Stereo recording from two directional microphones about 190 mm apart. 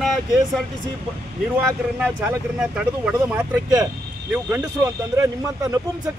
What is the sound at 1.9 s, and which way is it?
Speech, 5° right (ahead or behind).